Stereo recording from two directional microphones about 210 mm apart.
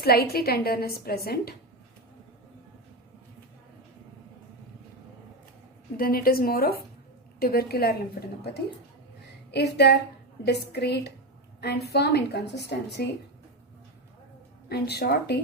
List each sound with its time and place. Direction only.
0.0 s a woman's voice: 45° left (ahead or behind)
6.0 s a woman's voice: 45° left (ahead or behind)
9.5 s a woman's voice: 50° left (ahead or behind)
14.7 s a woman's voice: 50° left (ahead or behind)